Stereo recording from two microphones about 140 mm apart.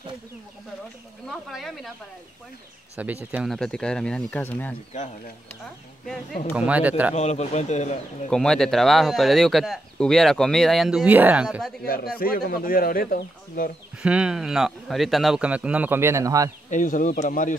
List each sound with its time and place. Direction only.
1.3 s speech: centre (ahead or behind)
3.0 s speech: 10° right (ahead or behind)
3.4 s speech: 5° left (ahead or behind)
6.5 s speech: 10° right (ahead or behind)
7.2 s a man's voice: 50° left (ahead or behind)
8.3 s speech: 5° left (ahead or behind)
11.1 s speech: 10° right (ahead or behind)
11.8 s speech: 90° left
14.0 s speech: 5° right (ahead or behind); by 16.5 s 25° right (ahead or behind)
16.7 s speech: 70° left (ahead or behind)